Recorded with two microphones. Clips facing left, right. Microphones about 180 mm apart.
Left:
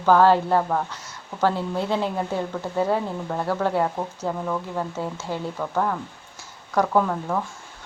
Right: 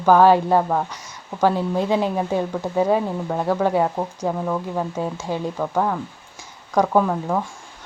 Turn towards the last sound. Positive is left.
turn(degrees=-15)  # may be behind; listen again after turning